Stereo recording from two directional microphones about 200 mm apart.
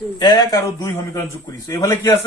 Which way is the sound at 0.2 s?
20° left (ahead or behind).